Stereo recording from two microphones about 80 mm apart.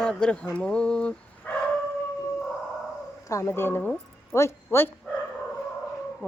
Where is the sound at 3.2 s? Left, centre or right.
Left.